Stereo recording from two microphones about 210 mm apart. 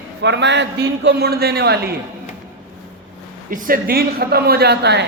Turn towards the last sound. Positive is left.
turn(degrees=-50)  # may be behind; listen again after turning